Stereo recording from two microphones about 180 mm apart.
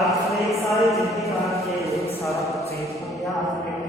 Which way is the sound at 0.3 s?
Centre (ahead or behind).